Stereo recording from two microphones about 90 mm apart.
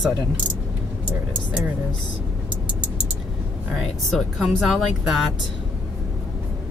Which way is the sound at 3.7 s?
5° left (ahead or behind).